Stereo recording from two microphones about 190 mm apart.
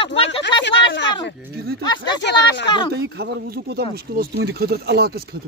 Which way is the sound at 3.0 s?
60° right (ahead or behind).